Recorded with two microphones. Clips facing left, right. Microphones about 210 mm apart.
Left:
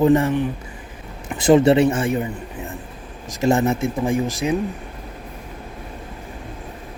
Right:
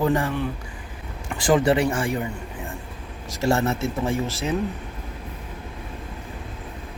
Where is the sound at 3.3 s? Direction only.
20° left (ahead or behind).